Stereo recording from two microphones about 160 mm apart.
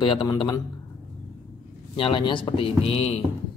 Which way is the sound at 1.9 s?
35° left (ahead or behind).